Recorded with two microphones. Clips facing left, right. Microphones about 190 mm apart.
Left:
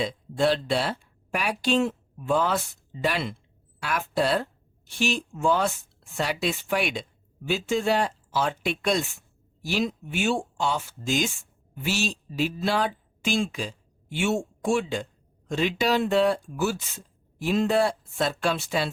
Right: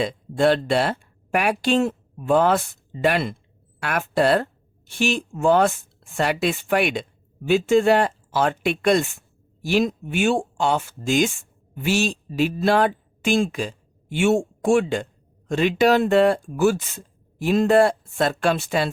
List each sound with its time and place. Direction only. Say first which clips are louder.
0.0 s speech: right 4 dB; 55° right (ahead or behind)